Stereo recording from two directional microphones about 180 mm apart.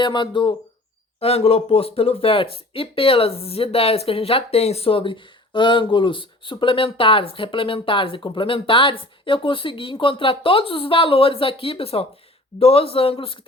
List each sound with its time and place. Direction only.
0.0 s a man's voice: 25° left (ahead or behind)